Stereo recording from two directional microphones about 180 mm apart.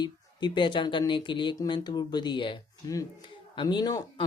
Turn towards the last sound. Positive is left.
turn(degrees=20)  # may be behind; listen again after turning